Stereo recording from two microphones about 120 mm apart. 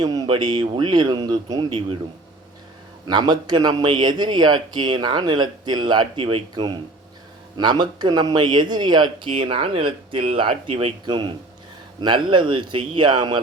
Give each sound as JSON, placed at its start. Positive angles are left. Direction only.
{"t": 0.0, "sound": "speech", "side_deg": -30}
{"t": 3.1, "sound": "speech", "side_deg": -40}
{"t": 11.0, "sound": "speech", "side_deg": -40}